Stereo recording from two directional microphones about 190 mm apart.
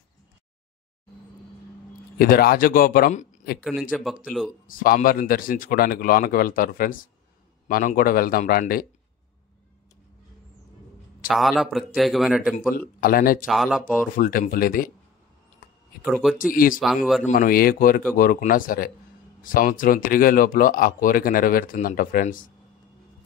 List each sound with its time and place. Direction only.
2.1 s speech: 50° left (ahead or behind)
3.9 s a man's voice: centre (ahead or behind)
4.6 s speech: 45° left (ahead or behind)
11.2 s a man's voice: centre (ahead or behind)
13.0 s speech: 50° left (ahead or behind)
13.5 s a man's voice: centre (ahead or behind)
14.1 s speech: 45° left (ahead or behind)
16.5 s speech: 45° left (ahead or behind)
16.8 s a man's voice: centre (ahead or behind)
17.2 s speech: 45° left (ahead or behind)